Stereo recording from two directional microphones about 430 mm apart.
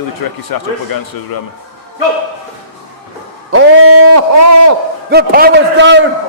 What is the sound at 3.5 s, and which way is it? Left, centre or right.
A man's voice, right.